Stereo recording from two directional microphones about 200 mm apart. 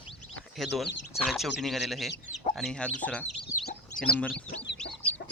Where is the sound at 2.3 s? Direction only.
35° left (ahead or behind).